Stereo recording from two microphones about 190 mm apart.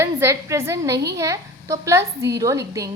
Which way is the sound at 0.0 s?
15° right (ahead or behind).